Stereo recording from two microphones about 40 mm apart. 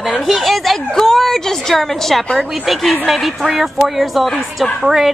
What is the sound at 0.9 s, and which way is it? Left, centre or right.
A woman's voice, centre.